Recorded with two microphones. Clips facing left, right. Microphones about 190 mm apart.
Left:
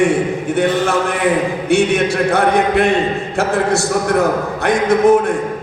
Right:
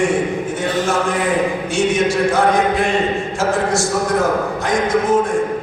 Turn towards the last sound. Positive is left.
turn(degrees=65)  # may be behind; listen again after turning